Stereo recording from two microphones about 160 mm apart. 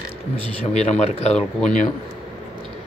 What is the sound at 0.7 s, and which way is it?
Speech, 45° left (ahead or behind).